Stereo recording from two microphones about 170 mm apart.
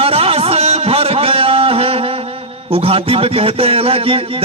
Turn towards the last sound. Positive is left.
turn(degrees=-35)  # may be behind; listen again after turning